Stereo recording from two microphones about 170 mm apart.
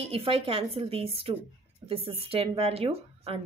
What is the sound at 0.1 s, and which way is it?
Speech, 30° right (ahead or behind).